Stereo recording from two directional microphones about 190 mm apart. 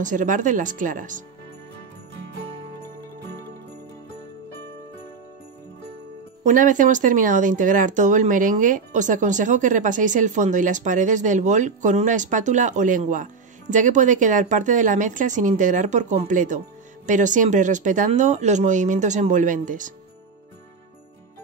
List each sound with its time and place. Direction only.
0.0 s speech: 40° right (ahead or behind)
6.4 s speech: 45° right (ahead or behind)